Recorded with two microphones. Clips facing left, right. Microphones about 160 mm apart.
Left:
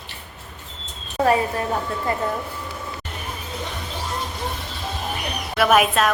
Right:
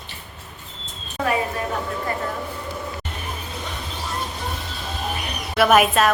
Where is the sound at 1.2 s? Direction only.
30° left (ahead or behind).